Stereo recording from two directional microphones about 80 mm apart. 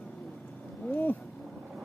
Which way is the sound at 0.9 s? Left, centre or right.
Left.